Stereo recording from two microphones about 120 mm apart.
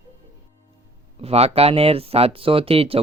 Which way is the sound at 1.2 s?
60° right (ahead or behind).